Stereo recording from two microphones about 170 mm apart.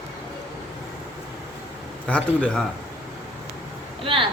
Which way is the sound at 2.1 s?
10° left (ahead or behind).